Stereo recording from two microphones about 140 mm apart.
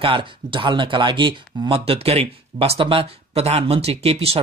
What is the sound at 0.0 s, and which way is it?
Speech, 40° right (ahead or behind).